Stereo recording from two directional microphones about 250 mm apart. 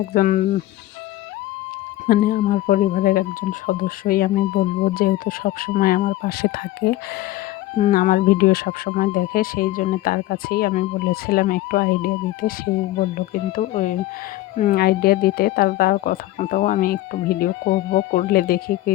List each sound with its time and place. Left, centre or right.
0.1 s speech: left
2.0 s speech: left